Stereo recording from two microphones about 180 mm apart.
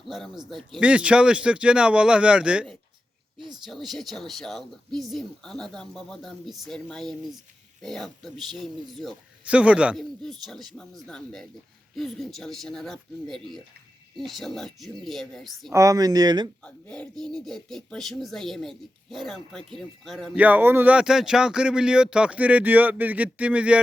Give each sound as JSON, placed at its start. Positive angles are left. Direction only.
{"t": 0.0, "sound": "speech", "side_deg": 0}
{"t": 15.7, "sound": "speech", "side_deg": -20}
{"t": 16.6, "sound": "speech", "side_deg": 5}
{"t": 20.3, "sound": "speech", "side_deg": -10}